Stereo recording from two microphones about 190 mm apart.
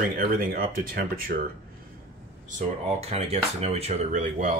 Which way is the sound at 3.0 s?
35° right (ahead or behind).